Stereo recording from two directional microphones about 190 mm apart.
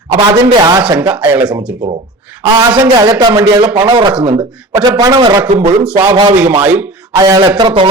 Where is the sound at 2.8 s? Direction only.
25° right (ahead or behind).